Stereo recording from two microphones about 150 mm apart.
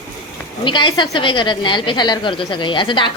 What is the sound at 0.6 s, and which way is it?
A woman's voice, 30° left (ahead or behind).